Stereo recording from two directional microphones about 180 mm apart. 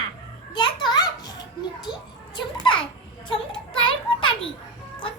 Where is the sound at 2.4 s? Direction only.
25° left (ahead or behind).